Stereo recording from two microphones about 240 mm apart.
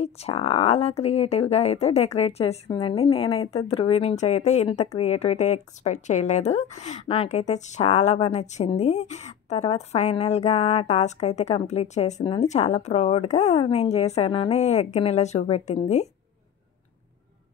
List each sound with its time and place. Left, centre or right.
0.0 s speech: left